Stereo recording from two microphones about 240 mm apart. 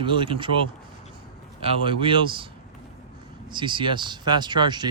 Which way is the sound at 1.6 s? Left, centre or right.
Right.